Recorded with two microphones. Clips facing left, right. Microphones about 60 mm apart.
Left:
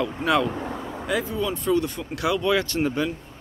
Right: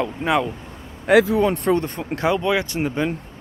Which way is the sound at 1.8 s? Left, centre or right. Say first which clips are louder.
Right 4 dB; right.